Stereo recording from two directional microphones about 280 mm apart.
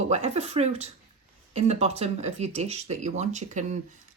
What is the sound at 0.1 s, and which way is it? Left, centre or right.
Speech, right.